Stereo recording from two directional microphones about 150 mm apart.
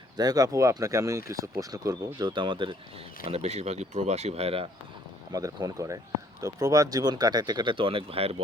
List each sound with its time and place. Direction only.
0.2 s speech: 25° right (ahead or behind)
3.2 s speech: 45° right (ahead or behind)
5.3 s speech: 25° right (ahead or behind); by 8.4 s 40° right (ahead or behind)